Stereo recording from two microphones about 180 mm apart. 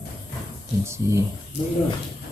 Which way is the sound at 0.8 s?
15° right (ahead or behind).